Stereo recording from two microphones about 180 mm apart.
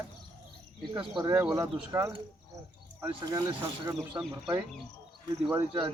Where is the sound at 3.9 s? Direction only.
5° right (ahead or behind).